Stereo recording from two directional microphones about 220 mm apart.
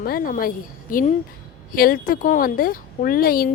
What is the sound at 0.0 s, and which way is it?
A woman's voice, 40° left (ahead or behind).